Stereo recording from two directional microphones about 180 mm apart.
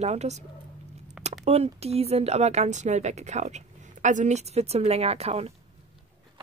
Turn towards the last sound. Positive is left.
turn(degrees=-35)  # may be behind; listen again after turning